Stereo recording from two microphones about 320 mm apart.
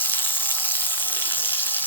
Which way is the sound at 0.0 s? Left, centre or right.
Centre.